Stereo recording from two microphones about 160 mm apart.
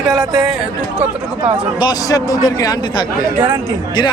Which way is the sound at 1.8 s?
20° left (ahead or behind).